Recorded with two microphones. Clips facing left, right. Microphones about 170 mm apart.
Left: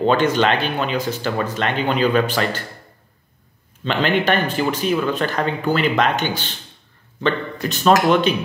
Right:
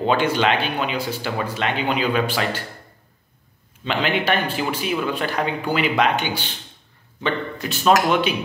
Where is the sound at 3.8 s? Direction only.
10° right (ahead or behind).